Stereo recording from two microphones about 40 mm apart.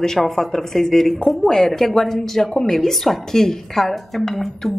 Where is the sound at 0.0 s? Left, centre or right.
Centre.